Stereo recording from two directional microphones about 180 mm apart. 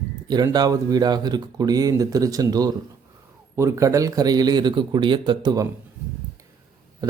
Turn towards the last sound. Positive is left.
turn(degrees=-20)  # may be behind; listen again after turning